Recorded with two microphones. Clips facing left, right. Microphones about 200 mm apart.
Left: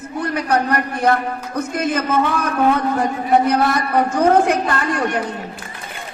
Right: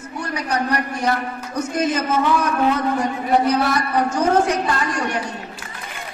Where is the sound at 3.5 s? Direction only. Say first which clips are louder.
Left 2 dB; 55° left (ahead or behind).